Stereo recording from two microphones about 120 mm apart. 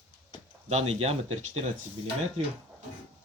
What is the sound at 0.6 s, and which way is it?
Speech, 60° right (ahead or behind).